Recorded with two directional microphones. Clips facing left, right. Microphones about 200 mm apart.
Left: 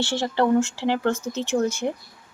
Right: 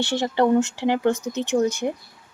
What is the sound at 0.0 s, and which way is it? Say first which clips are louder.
Speech: right 2 dB; 20° right (ahead or behind).